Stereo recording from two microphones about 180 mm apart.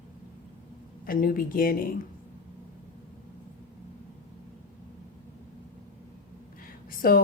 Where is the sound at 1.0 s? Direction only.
50° left (ahead or behind).